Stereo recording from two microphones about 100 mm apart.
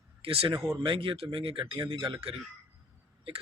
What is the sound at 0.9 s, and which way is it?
Speech, 60° right (ahead or behind).